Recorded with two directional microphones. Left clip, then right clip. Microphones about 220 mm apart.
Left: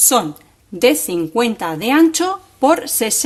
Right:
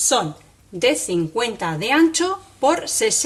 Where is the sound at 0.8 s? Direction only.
45° left (ahead or behind).